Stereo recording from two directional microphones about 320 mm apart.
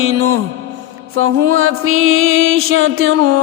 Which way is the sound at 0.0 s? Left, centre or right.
Right.